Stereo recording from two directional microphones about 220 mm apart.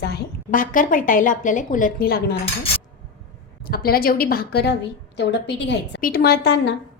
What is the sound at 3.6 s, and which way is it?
A woman's voice, 45° left (ahead or behind).